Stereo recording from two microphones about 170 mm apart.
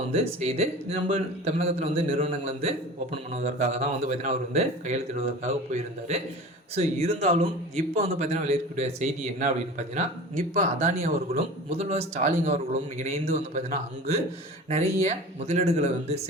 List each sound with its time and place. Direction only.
0.1 s a man's voice: 40° right (ahead or behind)